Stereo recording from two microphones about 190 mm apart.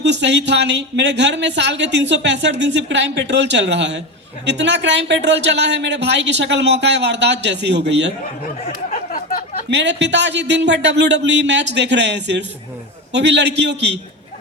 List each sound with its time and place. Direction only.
0.0 s speech: 65° right (ahead or behind)
8.9 s a sound: 45° left (ahead or behind)
9.6 s a man's voice: 65° right (ahead or behind)